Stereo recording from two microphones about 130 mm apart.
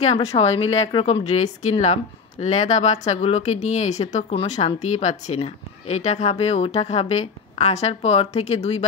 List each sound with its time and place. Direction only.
0.0 s speech: 55° left (ahead or behind)